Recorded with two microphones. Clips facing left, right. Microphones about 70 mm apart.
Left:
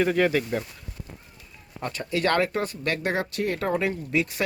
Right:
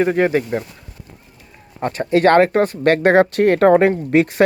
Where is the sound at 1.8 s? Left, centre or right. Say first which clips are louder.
Right 11 dB; right.